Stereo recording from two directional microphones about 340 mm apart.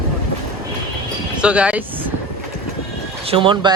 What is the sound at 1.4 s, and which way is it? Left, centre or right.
Speech, centre.